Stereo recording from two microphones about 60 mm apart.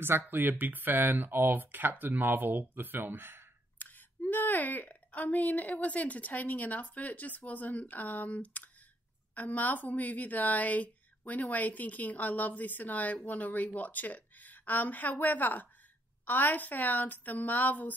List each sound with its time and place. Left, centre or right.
0.3 s speech: right
3.7 s a woman's voice: left